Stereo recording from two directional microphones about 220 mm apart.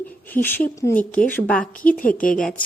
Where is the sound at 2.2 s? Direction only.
40° left (ahead or behind).